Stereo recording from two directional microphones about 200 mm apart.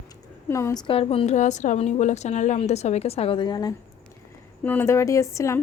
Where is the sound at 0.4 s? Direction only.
15° left (ahead or behind).